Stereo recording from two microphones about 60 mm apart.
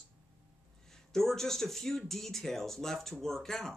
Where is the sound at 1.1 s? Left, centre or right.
Centre.